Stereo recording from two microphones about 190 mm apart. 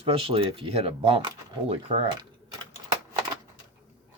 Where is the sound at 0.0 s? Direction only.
30° right (ahead or behind).